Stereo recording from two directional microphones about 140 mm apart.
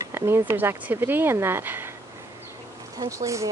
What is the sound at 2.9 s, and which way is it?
Speech, 20° right (ahead or behind).